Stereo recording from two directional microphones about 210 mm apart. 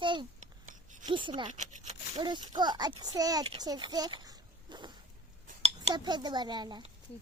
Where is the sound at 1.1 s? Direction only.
25° right (ahead or behind).